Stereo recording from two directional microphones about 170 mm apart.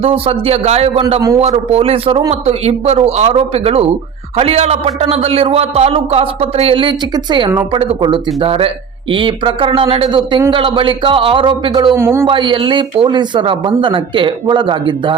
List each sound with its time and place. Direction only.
0.0 s a man's voice: 35° right (ahead or behind)
11.9 s speech: 15° right (ahead or behind)
12.2 s speech: 30° right (ahead or behind)